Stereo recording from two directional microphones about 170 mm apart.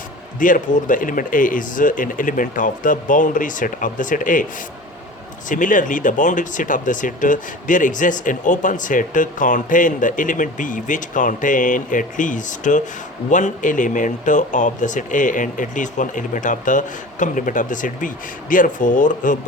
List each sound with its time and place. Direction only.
0.3 s speech: 50° left (ahead or behind)
5.5 s speech: 50° left (ahead or behind)